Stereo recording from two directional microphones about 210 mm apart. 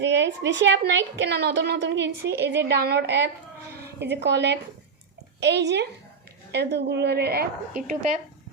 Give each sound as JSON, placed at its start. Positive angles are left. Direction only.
{"t": 0.0, "sound": "a woman's voice", "side_deg": -55}